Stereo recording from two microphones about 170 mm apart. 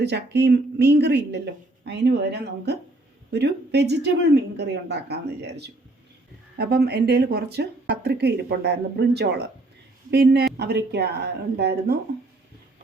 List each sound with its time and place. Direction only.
0.0 s speech: 80° right
6.6 s speech: 65° right (ahead or behind)